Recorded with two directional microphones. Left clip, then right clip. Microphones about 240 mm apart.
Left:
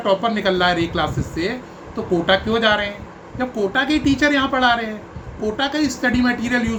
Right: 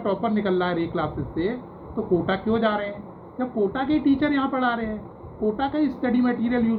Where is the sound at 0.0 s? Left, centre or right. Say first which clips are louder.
Left 7 dB; left.